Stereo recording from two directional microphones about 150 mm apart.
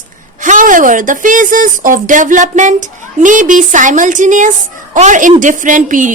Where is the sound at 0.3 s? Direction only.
60° right (ahead or behind).